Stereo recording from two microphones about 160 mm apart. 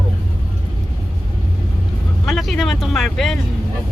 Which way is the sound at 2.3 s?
Centre (ahead or behind).